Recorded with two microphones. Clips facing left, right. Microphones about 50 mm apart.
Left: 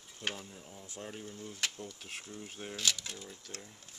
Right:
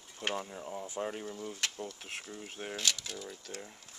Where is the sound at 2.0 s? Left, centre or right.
Centre.